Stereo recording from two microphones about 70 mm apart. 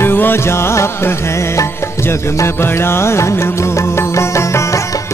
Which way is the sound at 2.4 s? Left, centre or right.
Left.